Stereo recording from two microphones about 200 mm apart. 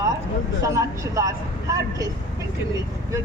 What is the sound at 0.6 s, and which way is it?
Speech, 15° right (ahead or behind).